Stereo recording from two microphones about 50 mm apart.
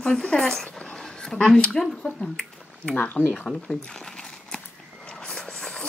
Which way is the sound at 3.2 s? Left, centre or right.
Left.